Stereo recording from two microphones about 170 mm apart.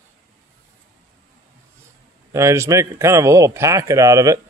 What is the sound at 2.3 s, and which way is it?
Speech, 15° right (ahead or behind).